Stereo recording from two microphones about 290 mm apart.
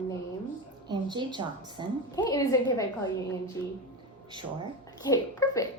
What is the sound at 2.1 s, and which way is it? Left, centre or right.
Speech, centre.